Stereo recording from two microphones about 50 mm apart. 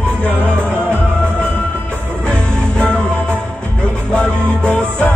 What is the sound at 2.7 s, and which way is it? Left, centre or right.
Music, left.